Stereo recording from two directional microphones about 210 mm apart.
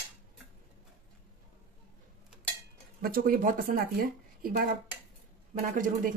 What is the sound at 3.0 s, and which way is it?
A man's voice, 45° right (ahead or behind).